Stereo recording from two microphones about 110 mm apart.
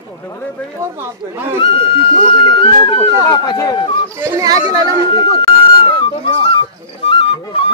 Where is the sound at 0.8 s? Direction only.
20° right (ahead or behind).